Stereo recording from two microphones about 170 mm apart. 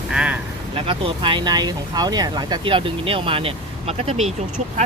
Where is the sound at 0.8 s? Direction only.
30° right (ahead or behind).